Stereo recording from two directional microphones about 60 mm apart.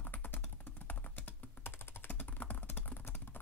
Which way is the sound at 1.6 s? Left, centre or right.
Left.